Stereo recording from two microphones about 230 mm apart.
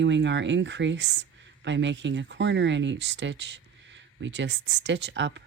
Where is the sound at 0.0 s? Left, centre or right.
Right.